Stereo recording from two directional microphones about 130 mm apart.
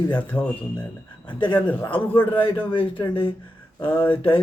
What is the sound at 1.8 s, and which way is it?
A man's voice, 40° left (ahead or behind).